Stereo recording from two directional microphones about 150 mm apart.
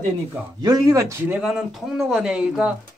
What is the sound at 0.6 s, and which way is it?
Speech, 25° right (ahead or behind).